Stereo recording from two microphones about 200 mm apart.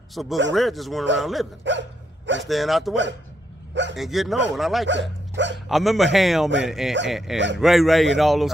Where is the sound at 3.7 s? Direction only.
65° right (ahead or behind).